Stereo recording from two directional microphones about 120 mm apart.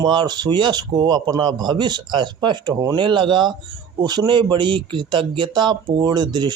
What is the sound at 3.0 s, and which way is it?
Speech, 40° right (ahead or behind).